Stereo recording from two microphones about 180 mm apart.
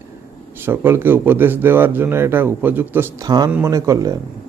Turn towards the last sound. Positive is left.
turn(degrees=-20)  # may be behind; listen again after turning